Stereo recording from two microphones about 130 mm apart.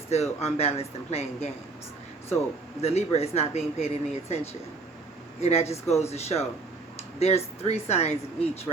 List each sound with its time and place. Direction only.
0.1 s speech: 55° left (ahead or behind)
2.8 s speech: 55° left (ahead or behind)